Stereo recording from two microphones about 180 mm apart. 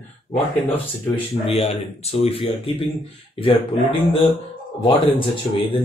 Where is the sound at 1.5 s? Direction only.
35° left (ahead or behind).